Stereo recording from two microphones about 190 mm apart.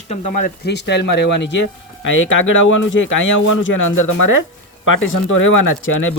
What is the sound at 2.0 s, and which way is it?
Speech, 85° left.